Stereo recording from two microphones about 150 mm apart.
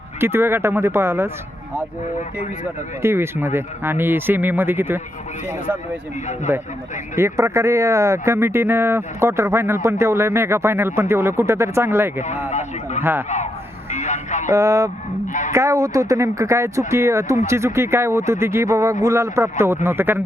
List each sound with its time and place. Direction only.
0.2 s speech: 15° right (ahead or behind)
3.0 s speech: 15° right (ahead or behind)
6.5 s speech: 15° right (ahead or behind)
12.5 s speech: 50° left (ahead or behind)
13.0 s speech: 15° right (ahead or behind)
13.9 s radio: 50° left (ahead or behind)
14.5 s speech: 20° right (ahead or behind)
15.3 s speech: 55° left (ahead or behind)
15.5 s speech: 20° right (ahead or behind)